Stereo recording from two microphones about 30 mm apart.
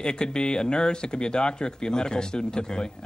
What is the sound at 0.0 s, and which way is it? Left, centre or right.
Speech, left.